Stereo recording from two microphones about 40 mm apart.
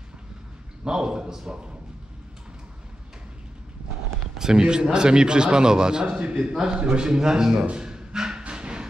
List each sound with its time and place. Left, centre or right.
0.8 s a man's voice: centre
4.4 s a man's voice: centre
6.0 s a man's voice: right
6.5 s a man's voice: centre
7.7 s a sound: centre